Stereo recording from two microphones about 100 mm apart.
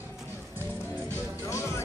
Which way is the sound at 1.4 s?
30° left (ahead or behind).